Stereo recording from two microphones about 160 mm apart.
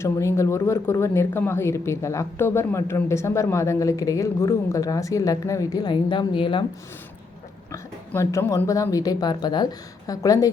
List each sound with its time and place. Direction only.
0.0 s speech: 20° left (ahead or behind)
7.7 s speech: 15° left (ahead or behind)